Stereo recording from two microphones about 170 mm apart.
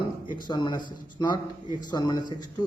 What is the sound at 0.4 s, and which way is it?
Speech, 25° left (ahead or behind).